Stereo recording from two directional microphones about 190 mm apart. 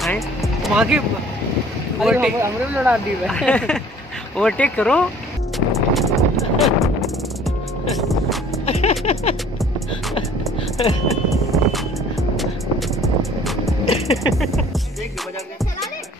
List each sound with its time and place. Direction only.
0.0 s music: centre (ahead or behind)
2.0 s speech: 5° right (ahead or behind)
3.3 s speech: 5° left (ahead or behind)
5.7 s music: centre (ahead or behind)
8.6 s music: 35° left (ahead or behind)
9.0 s speech: 35° left (ahead or behind)
11.2 s music: centre (ahead or behind)
13.8 s speech: 35° left (ahead or behind)
14.3 s speech: centre (ahead or behind)